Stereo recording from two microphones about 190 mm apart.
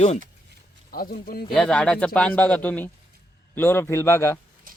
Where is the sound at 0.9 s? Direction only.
50° left (ahead or behind).